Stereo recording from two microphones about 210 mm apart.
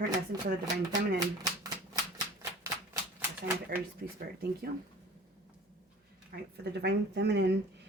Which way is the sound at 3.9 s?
45° right (ahead or behind).